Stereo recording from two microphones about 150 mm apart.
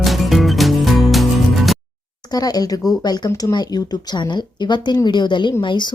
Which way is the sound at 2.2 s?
25° left (ahead or behind).